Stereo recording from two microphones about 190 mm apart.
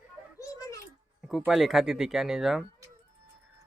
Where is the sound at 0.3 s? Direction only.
15° left (ahead or behind).